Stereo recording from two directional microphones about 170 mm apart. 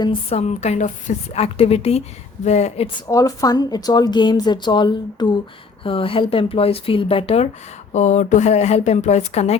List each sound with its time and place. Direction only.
0.0 s a woman's voice: 35° left (ahead or behind)
3.1 s a woman's voice: 20° left (ahead or behind); by 9.6 s 40° left (ahead or behind)